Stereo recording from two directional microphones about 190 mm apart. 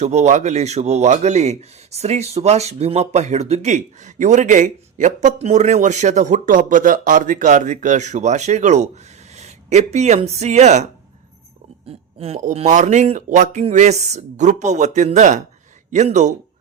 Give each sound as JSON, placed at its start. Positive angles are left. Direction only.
{"t": 0.0, "sound": "speech", "side_deg": -35}
{"t": 11.9, "sound": "speech", "side_deg": -30}